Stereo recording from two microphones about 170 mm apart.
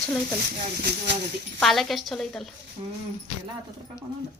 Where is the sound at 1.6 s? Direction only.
Centre (ahead or behind).